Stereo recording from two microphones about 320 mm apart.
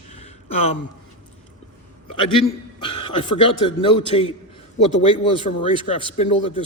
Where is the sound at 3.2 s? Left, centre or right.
Centre.